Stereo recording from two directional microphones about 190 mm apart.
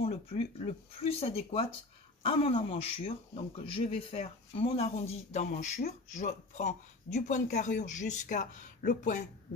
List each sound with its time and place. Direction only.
0.0 s speech: 35° left (ahead or behind)